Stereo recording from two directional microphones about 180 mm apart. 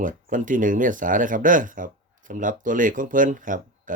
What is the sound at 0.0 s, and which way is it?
Speech, 45° right (ahead or behind).